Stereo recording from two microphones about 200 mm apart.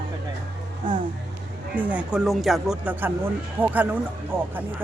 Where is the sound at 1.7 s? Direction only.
5° right (ahead or behind).